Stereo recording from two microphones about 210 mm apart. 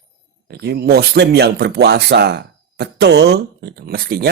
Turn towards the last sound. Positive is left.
turn(degrees=-45)  # may be behind; listen again after turning